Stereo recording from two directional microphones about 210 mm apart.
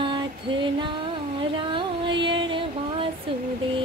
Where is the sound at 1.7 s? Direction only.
25° right (ahead or behind).